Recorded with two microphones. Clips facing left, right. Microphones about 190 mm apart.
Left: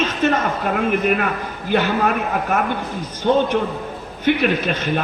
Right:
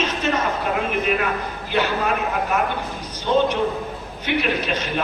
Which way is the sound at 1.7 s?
50° left (ahead or behind).